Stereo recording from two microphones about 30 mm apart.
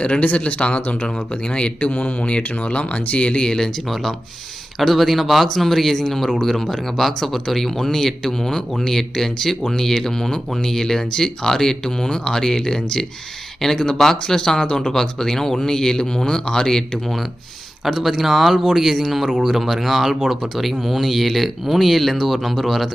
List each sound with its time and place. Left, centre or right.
0.0 s speech: left
1.0 s speech: left
4.8 s speech: centre
17.9 s speech: centre